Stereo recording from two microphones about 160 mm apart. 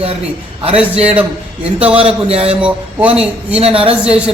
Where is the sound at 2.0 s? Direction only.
35° right (ahead or behind).